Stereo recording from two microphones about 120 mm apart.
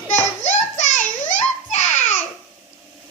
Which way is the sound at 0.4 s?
80° left.